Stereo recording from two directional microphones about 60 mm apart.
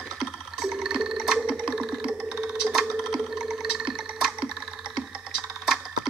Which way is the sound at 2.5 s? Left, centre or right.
Centre.